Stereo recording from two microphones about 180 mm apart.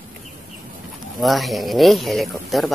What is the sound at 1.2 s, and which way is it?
Speech, centre (ahead or behind).